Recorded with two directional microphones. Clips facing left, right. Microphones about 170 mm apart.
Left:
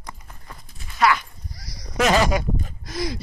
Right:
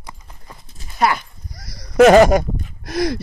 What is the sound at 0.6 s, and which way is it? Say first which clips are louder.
Clip-clop: right 1 dB; 35° right (ahead or behind).